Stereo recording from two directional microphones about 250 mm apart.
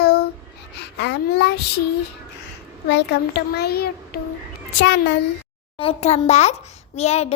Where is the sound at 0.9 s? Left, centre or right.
Left.